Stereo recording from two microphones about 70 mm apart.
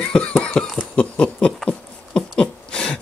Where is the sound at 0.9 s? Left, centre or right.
Centre.